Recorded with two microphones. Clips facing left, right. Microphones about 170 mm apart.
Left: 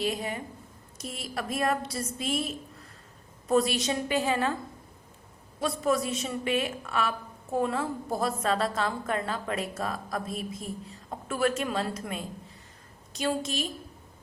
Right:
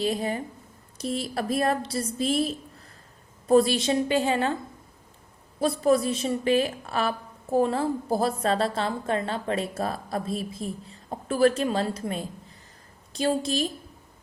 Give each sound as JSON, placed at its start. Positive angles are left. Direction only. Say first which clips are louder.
{"t": 0.0, "sound": "a woman's voice", "louder": "right 4 dB", "side_deg": -30}
{"t": 5.5, "sound": "a woman's voice", "louder": "right 5 dB", "side_deg": -30}